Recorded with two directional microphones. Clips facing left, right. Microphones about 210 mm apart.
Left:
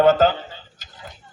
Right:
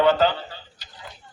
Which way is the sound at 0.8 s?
45° left (ahead or behind).